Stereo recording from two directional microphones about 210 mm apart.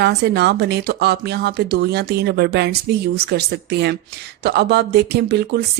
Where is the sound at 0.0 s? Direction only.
50° right (ahead or behind).